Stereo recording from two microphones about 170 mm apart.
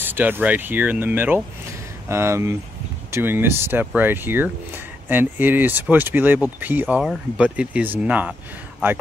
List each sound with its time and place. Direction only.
0.0 s speech: 10° right (ahead or behind)